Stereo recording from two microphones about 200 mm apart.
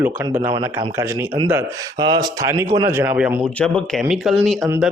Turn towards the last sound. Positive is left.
turn(degrees=0)  # may be behind; listen again after turning